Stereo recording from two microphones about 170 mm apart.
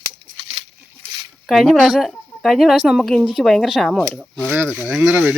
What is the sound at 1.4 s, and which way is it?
Speech, centre (ahead or behind).